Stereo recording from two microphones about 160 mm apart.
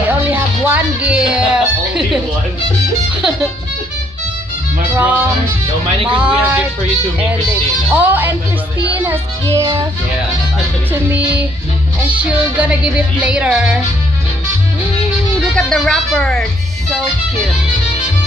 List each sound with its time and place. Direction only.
0.1 s music: 10° right (ahead or behind)
4.9 s music: 10° right (ahead or behind)
7.9 s music: 10° right (ahead or behind)
10.9 s music: 10° right (ahead or behind)
15.5 s speech: 5° left (ahead or behind)